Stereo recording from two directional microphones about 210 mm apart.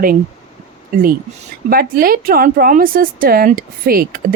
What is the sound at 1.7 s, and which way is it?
Speech, 45° right (ahead or behind).